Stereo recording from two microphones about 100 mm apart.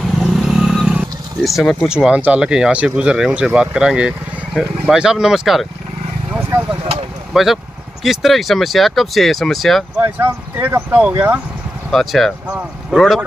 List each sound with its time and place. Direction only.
0.2 s vehicle: 5° right (ahead or behind)
1.6 s speech: 5° left (ahead or behind)
1.9 s speech: 10° right (ahead or behind)
7.3 s speech: 5° right (ahead or behind)
9.9 s speech: 25° right (ahead or behind)
11.9 s speech: centre (ahead or behind)